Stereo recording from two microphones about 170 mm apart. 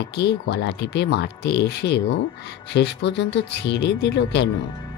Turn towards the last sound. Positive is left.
turn(degrees=85)